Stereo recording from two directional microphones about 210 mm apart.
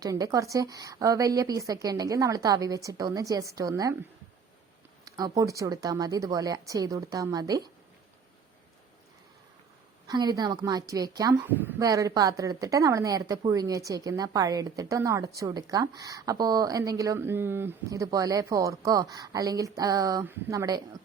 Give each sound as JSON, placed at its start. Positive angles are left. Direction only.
{"t": 0.0, "sound": "a woman's voice", "side_deg": -15}
{"t": 5.0, "sound": "a sound", "side_deg": -15}
{"t": 5.4, "sound": "a woman's voice", "side_deg": -15}
{"t": 10.1, "sound": "a woman's voice", "side_deg": -20}